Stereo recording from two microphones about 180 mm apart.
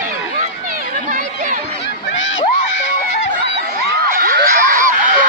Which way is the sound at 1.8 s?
90° left.